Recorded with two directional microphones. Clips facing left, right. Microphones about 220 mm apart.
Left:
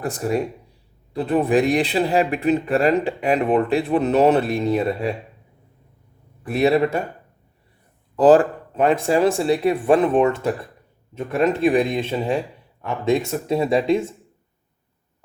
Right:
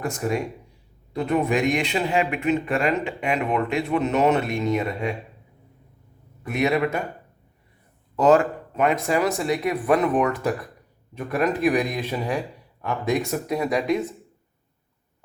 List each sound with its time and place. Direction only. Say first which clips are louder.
0.0 s speech: left 3 dB; 35° left (ahead or behind)
6.4 s speech: left 4 dB; 35° left (ahead or behind)
8.1 s speech: left 4 dB; 35° left (ahead or behind)